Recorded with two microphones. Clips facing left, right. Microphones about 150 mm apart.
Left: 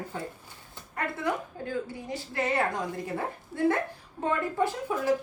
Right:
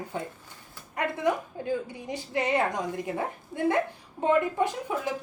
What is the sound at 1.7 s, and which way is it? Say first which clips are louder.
Speech: right 3 dB; 20° right (ahead or behind).